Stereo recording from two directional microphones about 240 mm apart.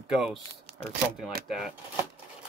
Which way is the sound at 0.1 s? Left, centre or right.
Centre.